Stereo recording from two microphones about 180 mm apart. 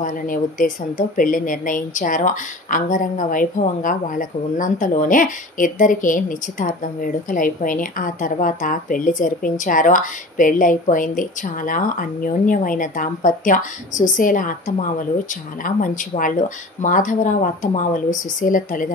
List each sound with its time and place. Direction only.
0.0 s a woman's voice: 50° left (ahead or behind)